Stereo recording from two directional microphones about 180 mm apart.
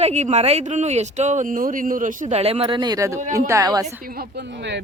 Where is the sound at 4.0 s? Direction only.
55° right (ahead or behind); by 4.8 s 75° right (ahead or behind).